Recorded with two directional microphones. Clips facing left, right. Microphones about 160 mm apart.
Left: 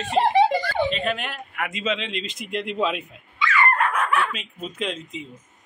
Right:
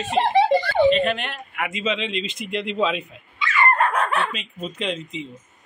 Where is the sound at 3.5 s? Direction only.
30° right (ahead or behind).